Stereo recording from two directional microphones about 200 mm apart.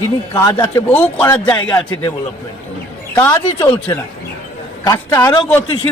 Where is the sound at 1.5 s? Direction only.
25° left (ahead or behind).